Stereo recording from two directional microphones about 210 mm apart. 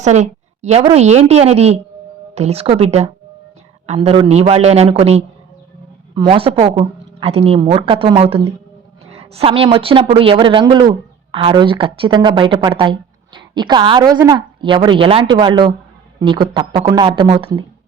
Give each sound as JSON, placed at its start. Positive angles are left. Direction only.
{"t": 0.0, "sound": "a woman's voice", "side_deg": -35}